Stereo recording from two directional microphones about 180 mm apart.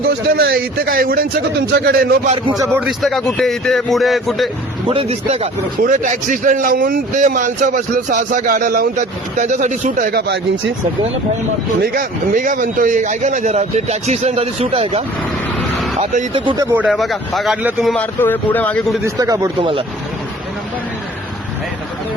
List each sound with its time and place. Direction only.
0.3 s a man's voice: 60° right (ahead or behind)
2.8 s speech: centre (ahead or behind)
4.9 s a man's voice: 35° right (ahead or behind)
5.8 s a man's voice: 45° right (ahead or behind)
10.1 s a man's voice: 65° right (ahead or behind)
11.8 s a man's voice: 50° right (ahead or behind); by 15.0 s 35° right (ahead or behind)
16.3 s speech: 25° right (ahead or behind)
16.7 s speech: centre (ahead or behind)
17.9 s a man's voice: 10° left (ahead or behind)
19.0 s speech: 20° right (ahead or behind)
19.5 s a man's voice: 30° right (ahead or behind)